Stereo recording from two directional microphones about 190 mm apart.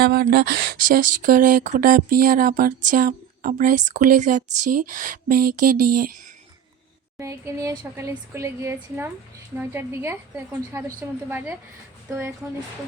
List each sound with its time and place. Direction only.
0.0 s speech: 55° right (ahead or behind)
7.2 s speech: 15° right (ahead or behind)